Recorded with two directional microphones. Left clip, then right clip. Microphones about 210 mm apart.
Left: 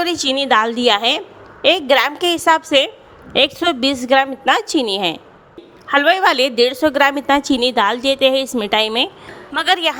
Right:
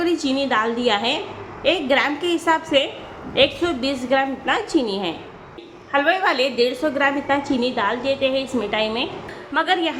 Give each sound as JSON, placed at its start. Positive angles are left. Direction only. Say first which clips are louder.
{"t": 0.0, "sound": "a woman's voice", "louder": "left 3 dB", "side_deg": 45}